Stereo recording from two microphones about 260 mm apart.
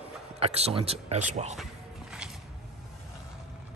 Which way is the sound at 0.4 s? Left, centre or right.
Right.